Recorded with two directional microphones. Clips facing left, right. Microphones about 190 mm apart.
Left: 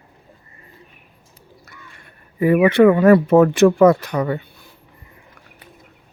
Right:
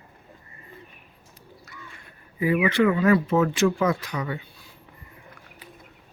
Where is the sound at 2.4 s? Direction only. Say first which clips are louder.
Left 8 dB; 55° left (ahead or behind).